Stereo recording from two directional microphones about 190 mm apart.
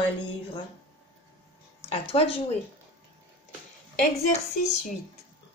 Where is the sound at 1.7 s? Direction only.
35° left (ahead or behind).